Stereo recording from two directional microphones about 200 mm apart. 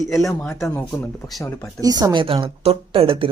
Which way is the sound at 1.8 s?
20° right (ahead or behind).